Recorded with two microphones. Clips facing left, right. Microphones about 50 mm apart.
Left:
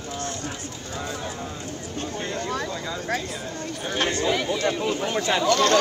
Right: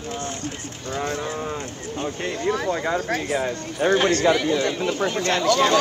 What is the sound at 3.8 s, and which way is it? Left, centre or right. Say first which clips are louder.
Speech: right 14 dB; right.